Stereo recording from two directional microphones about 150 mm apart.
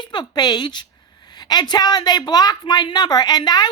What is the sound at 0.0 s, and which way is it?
A woman's voice, 30° left (ahead or behind).